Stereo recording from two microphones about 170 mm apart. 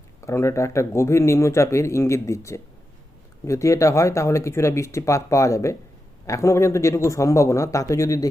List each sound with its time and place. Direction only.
0.2 s speech: 15° left (ahead or behind)